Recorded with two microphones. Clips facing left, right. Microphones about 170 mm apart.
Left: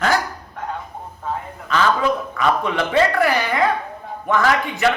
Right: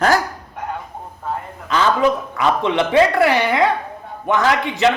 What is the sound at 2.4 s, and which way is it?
A man's voice, 25° right (ahead or behind).